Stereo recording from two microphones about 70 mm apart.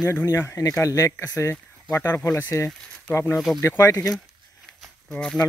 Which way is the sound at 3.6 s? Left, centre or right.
Left.